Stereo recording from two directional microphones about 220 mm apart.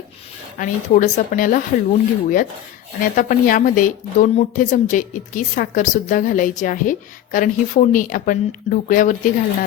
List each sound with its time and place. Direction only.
0.6 s a woman's voice: 35° left (ahead or behind)